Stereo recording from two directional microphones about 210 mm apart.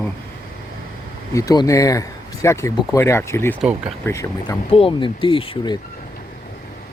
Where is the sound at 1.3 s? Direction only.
15° left (ahead or behind).